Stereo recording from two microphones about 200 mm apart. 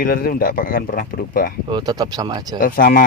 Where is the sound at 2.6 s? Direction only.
45° left (ahead or behind).